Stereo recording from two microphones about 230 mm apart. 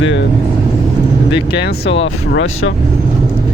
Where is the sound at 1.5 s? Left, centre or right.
Left.